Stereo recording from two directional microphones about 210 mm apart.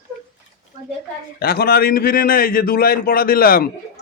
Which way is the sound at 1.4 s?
45° left (ahead or behind).